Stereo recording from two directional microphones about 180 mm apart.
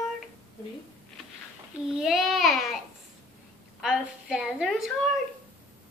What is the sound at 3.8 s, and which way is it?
A woman's voice, 5° right (ahead or behind).